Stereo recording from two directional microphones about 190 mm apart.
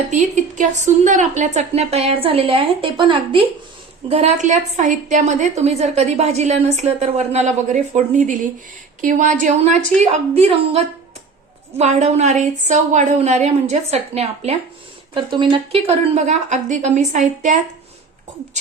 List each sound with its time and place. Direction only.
0.1 s a woman's voice: 40° right (ahead or behind)
4.1 s a woman's voice: 35° right (ahead or behind)